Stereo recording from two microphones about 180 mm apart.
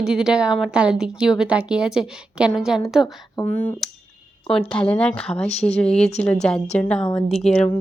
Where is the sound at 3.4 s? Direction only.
10° left (ahead or behind).